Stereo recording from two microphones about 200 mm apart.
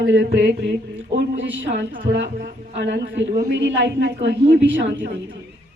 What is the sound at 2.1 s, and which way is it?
A woman's voice, 65° right (ahead or behind).